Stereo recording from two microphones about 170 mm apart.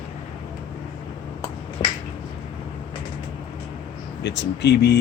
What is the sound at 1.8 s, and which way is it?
Finger snapping, 35° left (ahead or behind).